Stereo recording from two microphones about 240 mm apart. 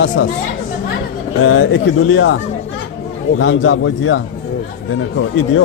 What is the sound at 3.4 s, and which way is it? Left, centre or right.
Speech, left.